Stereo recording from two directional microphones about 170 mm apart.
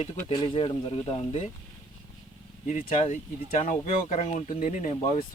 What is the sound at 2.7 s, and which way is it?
Speech, 50° left (ahead or behind).